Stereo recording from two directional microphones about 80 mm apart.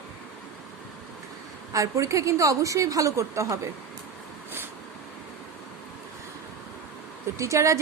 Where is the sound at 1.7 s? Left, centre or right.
Right.